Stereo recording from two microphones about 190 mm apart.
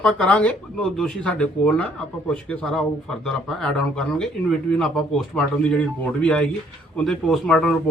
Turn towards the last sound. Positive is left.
turn(degrees=5)  # may be behind; listen again after turning